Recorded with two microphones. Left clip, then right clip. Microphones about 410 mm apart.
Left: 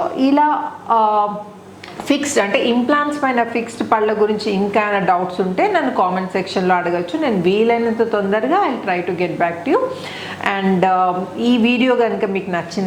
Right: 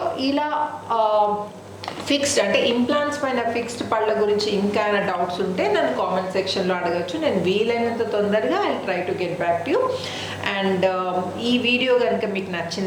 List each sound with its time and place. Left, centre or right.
0.2 s a woman's voice: left